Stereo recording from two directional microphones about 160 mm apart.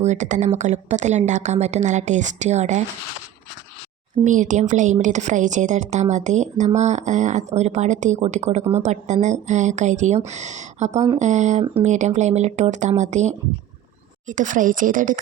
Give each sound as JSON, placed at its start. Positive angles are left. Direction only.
{"t": 0.0, "sound": "a woman's voice", "side_deg": -45}
{"t": 4.2, "sound": "a woman's voice", "side_deg": -50}